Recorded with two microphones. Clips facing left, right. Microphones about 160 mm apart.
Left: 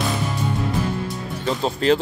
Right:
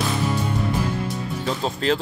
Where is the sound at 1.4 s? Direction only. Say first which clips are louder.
Left 4 dB; centre (ahead or behind).